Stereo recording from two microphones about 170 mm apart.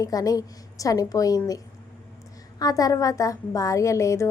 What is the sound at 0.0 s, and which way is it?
A woman's voice, 20° left (ahead or behind).